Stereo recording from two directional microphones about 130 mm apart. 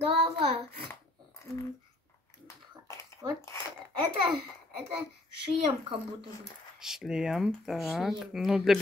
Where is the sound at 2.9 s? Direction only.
20° left (ahead or behind).